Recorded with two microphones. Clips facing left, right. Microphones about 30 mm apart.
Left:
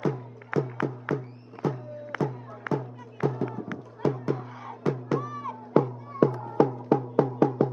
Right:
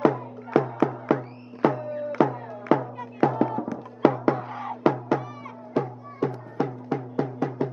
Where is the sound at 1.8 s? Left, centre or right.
Right.